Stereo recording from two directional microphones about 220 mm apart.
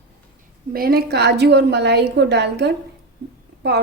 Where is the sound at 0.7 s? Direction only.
45° right (ahead or behind).